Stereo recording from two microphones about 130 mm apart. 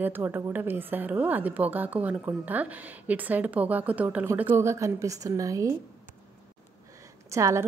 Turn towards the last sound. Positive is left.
turn(degrees=-25)  # may be behind; listen again after turning